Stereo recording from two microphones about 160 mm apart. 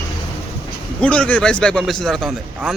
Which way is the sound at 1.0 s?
5° left (ahead or behind).